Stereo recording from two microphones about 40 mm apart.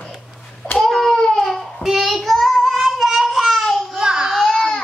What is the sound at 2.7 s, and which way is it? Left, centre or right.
Child singing, centre.